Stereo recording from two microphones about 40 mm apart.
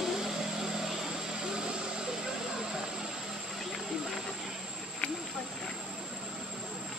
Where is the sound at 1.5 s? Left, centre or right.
Right.